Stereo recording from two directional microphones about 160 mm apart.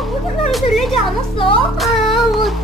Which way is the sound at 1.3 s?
35° left (ahead or behind).